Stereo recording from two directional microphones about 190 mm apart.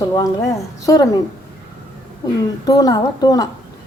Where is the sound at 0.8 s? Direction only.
20° left (ahead or behind).